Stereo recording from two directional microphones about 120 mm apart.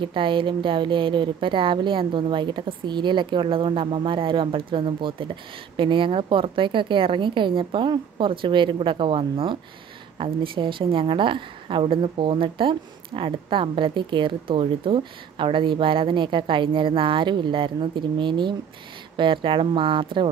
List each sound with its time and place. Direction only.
0.0 s speech: 45° right (ahead or behind)